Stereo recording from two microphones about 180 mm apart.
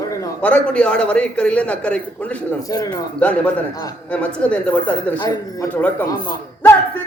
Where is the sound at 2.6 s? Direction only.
20° left (ahead or behind).